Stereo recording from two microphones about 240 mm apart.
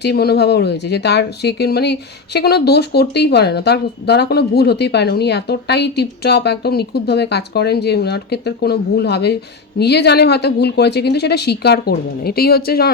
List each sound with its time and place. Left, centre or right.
0.0 s speech: left